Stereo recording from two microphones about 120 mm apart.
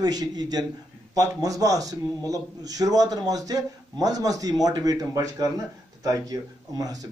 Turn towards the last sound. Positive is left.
turn(degrees=-30)  # may be behind; listen again after turning